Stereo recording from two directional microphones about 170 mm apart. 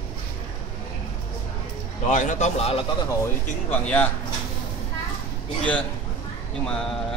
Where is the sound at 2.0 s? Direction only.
45° left (ahead or behind).